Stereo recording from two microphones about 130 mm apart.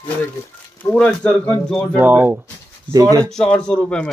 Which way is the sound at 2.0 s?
15° right (ahead or behind).